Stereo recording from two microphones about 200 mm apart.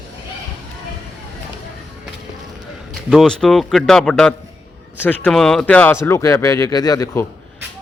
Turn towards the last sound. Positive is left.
turn(degrees=15)  # may be behind; listen again after turning